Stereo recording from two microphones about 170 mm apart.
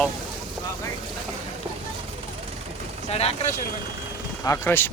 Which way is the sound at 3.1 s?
35° left (ahead or behind).